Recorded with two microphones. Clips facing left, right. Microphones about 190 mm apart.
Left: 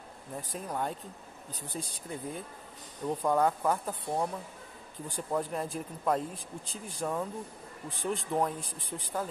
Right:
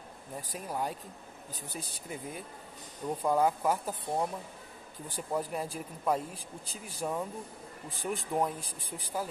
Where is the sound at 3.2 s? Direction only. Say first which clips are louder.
Even; 10° right (ahead or behind).